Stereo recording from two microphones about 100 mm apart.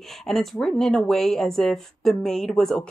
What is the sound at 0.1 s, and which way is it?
Speech, centre (ahead or behind).